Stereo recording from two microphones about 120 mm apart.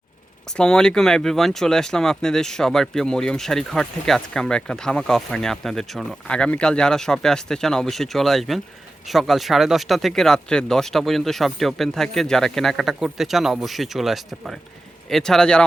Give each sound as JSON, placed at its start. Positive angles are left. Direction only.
{"t": 0.5, "sound": "speech", "side_deg": 5}